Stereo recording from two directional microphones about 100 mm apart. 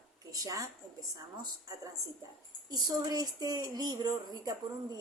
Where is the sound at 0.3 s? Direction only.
35° right (ahead or behind).